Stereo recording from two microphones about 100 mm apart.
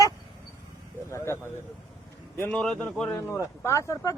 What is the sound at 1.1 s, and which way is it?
Speech, 25° left (ahead or behind).